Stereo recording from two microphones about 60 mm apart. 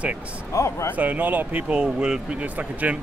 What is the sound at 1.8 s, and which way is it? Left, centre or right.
Speech, centre.